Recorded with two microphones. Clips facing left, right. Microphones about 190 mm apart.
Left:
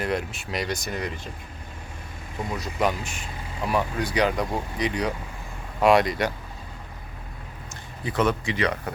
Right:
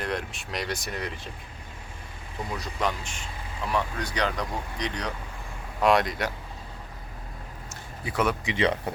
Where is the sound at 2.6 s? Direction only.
10° left (ahead or behind).